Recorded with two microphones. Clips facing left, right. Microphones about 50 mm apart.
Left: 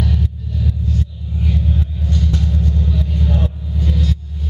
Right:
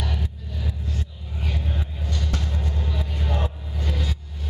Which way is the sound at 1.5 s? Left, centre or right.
Centre.